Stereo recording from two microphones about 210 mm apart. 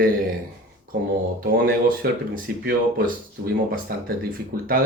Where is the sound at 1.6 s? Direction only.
45° right (ahead or behind).